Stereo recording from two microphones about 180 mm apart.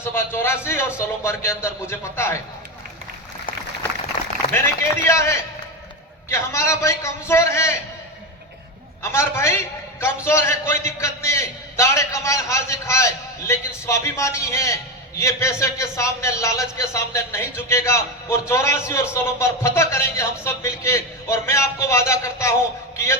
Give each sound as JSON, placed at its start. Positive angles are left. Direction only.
{"t": 0.0, "sound": "a man's voice", "side_deg": 15}
{"t": 4.5, "sound": "a man's voice", "side_deg": 15}
{"t": 9.1, "sound": "a man's voice", "side_deg": 15}